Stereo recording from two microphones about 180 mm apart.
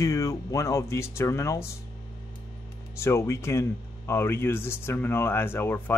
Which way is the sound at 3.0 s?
15° left (ahead or behind).